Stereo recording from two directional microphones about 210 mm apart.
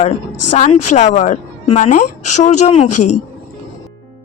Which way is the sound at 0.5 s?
35° left (ahead or behind).